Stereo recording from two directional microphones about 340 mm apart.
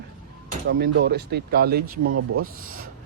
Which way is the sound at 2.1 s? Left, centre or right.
Right.